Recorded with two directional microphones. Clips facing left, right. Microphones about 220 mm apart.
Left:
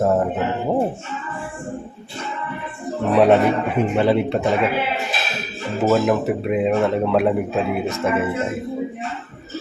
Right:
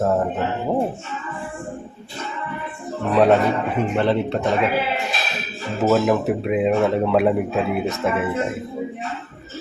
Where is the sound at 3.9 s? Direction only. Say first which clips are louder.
Left 2 dB; 10° left (ahead or behind).